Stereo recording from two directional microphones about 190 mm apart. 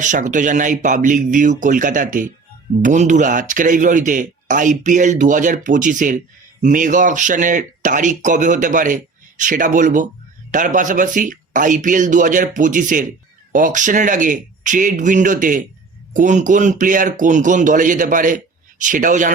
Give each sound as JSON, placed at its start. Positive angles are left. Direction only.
{"t": 0.0, "sound": "a man's voice", "side_deg": -40}